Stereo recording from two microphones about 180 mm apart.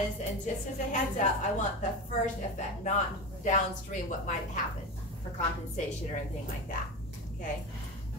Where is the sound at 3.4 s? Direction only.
45° left (ahead or behind).